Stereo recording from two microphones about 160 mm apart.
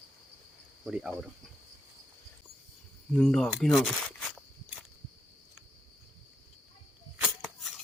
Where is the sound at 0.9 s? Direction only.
5° right (ahead or behind).